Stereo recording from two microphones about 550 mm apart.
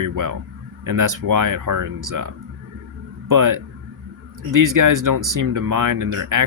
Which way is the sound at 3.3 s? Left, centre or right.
Right.